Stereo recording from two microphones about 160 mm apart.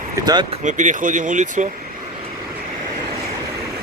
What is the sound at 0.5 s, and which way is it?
Speech, 50° right (ahead or behind).